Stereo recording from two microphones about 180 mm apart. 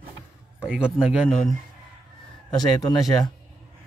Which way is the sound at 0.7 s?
5° right (ahead or behind).